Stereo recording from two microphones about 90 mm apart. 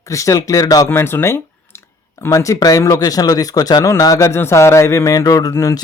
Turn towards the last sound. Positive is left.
turn(degrees=35)  # may be behind; listen again after turning